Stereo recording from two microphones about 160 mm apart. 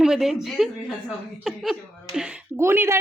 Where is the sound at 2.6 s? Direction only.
15° right (ahead or behind).